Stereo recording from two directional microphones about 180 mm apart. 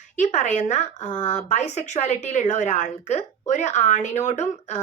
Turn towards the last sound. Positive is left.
turn(degrees=40)  # may be behind; listen again after turning